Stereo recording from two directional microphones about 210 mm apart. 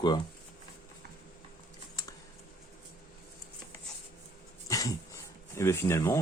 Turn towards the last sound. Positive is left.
turn(degrees=15)  # may be behind; listen again after turning